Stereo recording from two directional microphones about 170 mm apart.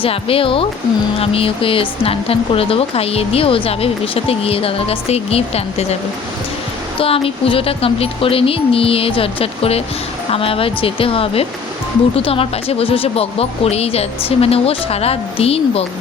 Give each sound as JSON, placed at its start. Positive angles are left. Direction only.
{"t": 0.0, "sound": "a woman's voice", "side_deg": 35}
{"t": 7.0, "sound": "a woman's voice", "side_deg": 35}